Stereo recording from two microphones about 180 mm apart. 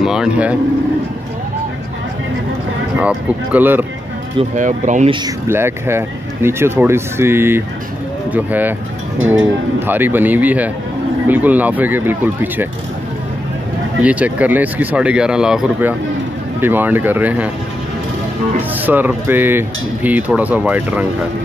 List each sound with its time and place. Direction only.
0.0 s speech: 5° right (ahead or behind)
3.0 s dishes: 10° right (ahead or behind)
4.6 s speech: 45° right (ahead or behind)
5.2 s dishes: 15° right (ahead or behind)
9.8 s dishes: 10° right (ahead or behind)
14.0 s dishes: 10° right (ahead or behind)
18.8 s dishes: 10° right (ahead or behind)